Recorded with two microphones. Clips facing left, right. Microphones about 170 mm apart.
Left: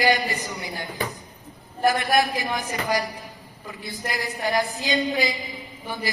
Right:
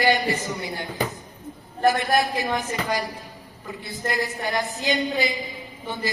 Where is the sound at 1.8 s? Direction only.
25° right (ahead or behind).